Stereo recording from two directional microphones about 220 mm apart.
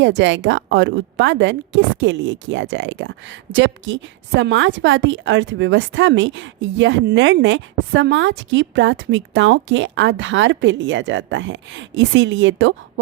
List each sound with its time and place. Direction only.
0.0 s a woman's voice: 55° right (ahead or behind)